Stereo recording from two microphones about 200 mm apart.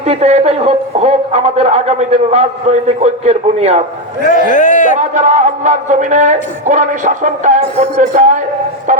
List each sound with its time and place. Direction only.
0.0 s a man's voice: 30° right (ahead or behind)
4.3 s a man's voice: 40° left (ahead or behind)
4.9 s speech: 35° right (ahead or behind)
8.9 s a sound: 40° right (ahead or behind)